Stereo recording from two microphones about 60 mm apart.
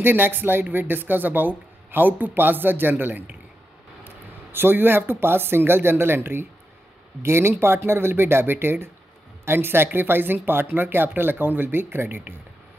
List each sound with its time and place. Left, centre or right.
0.0 s speech: right